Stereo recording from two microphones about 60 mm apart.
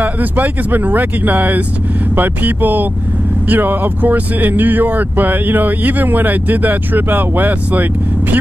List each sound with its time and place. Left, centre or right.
0.0 s speech: right